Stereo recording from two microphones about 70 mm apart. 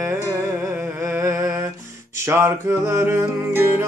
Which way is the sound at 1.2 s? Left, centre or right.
Right.